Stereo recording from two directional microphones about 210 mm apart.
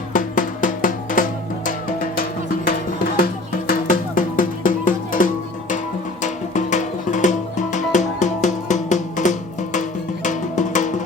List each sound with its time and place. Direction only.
0.1 s music: 40° left (ahead or behind)
3.7 s music: 40° left (ahead or behind)